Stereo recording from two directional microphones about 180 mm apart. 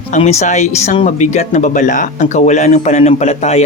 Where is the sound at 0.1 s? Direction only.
40° left (ahead or behind).